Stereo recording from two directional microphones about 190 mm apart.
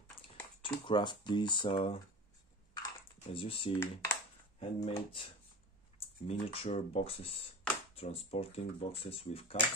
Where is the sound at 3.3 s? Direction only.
30° left (ahead or behind).